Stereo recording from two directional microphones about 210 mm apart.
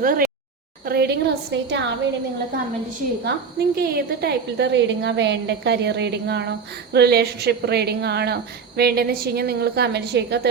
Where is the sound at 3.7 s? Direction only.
50° right (ahead or behind).